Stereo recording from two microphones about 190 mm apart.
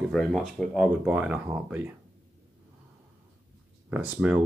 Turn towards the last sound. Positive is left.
turn(degrees=-10)  # may be behind; listen again after turning